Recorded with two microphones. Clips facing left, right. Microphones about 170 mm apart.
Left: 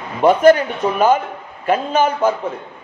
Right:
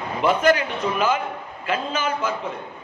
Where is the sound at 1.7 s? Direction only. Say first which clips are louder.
Left 8 dB; 55° left (ahead or behind).